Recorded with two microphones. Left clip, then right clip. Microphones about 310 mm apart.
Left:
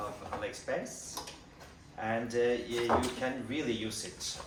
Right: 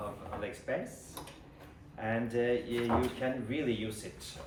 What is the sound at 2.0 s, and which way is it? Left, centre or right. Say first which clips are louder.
Speech: left 2 dB; centre.